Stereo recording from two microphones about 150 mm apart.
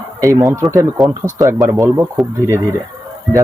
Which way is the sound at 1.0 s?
Centre (ahead or behind).